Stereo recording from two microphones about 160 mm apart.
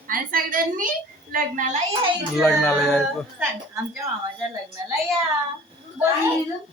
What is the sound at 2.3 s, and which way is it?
Speech, centre (ahead or behind).